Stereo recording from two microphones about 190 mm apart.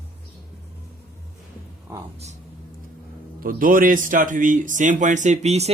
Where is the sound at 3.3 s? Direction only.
45° right (ahead or behind).